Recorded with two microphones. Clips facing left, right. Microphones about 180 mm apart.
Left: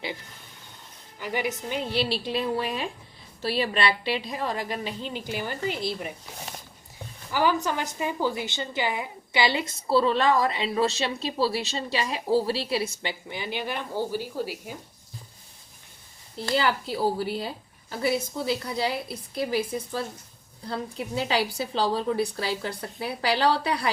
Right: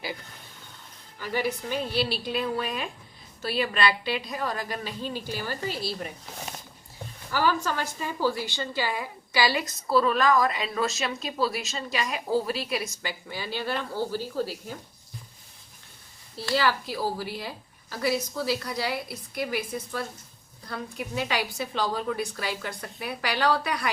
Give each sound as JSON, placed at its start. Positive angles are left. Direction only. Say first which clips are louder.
{"t": 1.2, "sound": "a woman's voice", "louder": "even", "side_deg": 15}
{"t": 7.3, "sound": "a woman's voice", "louder": "left 1 dB", "side_deg": 15}
{"t": 16.4, "sound": "a woman's voice", "louder": "left 1 dB", "side_deg": 20}